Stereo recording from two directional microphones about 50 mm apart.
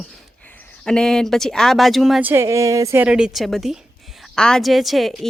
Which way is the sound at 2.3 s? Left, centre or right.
Right.